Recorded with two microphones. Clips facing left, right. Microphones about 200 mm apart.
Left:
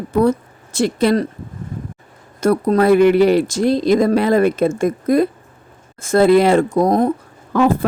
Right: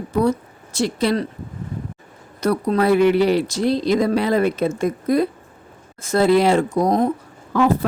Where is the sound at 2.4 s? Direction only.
45° left (ahead or behind).